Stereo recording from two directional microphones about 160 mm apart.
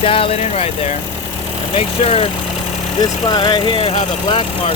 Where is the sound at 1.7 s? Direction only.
40° left (ahead or behind).